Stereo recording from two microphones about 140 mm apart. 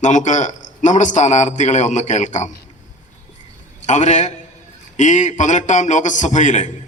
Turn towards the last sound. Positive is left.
turn(degrees=60)  # may be behind; listen again after turning